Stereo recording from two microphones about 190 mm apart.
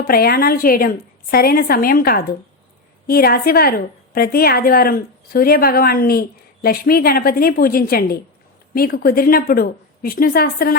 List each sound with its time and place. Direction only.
0.0 s a woman's voice: 50° left (ahead or behind)